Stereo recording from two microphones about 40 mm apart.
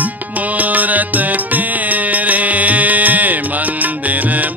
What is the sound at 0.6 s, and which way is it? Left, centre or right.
Music, right.